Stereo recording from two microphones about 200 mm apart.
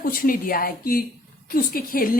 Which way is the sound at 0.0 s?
45° left (ahead or behind).